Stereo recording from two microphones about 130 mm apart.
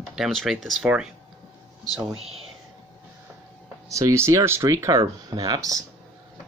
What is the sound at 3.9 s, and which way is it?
Speech, 25° right (ahead or behind).